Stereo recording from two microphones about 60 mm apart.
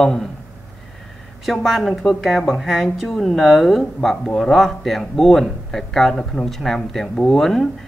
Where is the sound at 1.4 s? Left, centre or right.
Centre.